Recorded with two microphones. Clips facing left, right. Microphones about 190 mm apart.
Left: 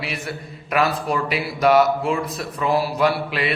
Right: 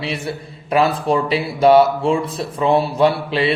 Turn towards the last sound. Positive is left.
turn(degrees=-30)  # may be behind; listen again after turning